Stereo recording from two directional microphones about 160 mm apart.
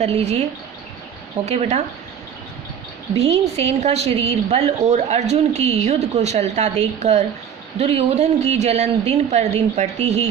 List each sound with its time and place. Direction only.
0.0 s a woman's voice: 45° right (ahead or behind)
1.5 s speech: 40° right (ahead or behind)
3.2 s a woman's voice: 40° right (ahead or behind)